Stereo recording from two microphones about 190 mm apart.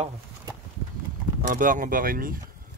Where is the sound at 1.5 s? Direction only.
45° right (ahead or behind).